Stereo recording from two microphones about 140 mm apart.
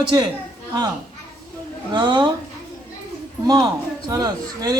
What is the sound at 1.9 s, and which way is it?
Speech, 35° right (ahead or behind).